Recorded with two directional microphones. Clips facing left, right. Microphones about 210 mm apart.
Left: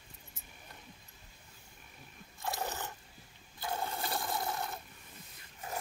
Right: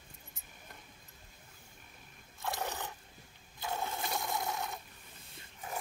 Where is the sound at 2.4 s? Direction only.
5° left (ahead or behind).